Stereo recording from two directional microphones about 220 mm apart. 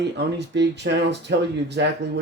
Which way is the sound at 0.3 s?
50° right (ahead or behind).